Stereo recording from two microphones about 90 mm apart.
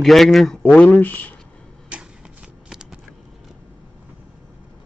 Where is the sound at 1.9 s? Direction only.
10° right (ahead or behind).